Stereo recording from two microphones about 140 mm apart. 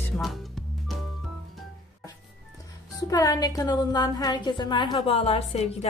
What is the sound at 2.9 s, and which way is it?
A woman's voice, 25° left (ahead or behind).